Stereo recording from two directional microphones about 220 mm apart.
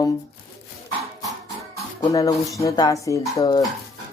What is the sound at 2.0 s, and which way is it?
Speech, 15° left (ahead or behind).